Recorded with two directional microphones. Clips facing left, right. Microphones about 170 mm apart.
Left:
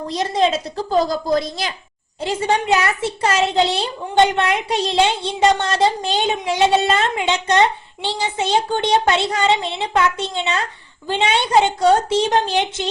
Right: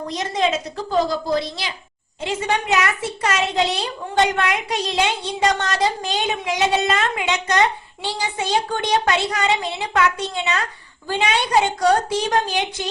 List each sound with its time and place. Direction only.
0.1 s a woman's voice: 35° left (ahead or behind)
2.2 s a child's voice: 30° left (ahead or behind)